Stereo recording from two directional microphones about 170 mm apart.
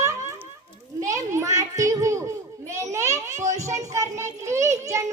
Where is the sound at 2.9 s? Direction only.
15° right (ahead or behind).